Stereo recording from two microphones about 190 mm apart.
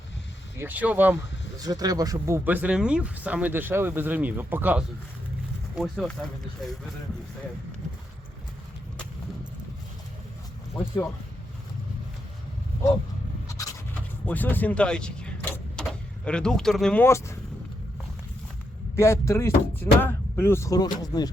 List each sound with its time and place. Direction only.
0.6 s speech: 10° right (ahead or behind)
1.5 s speech: 20° right (ahead or behind); by 6.9 s centre (ahead or behind)
13.5 s a sound: 15° left (ahead or behind)
13.9 s vehicle: 10° left (ahead or behind)
18.9 s speech: 15° left (ahead or behind)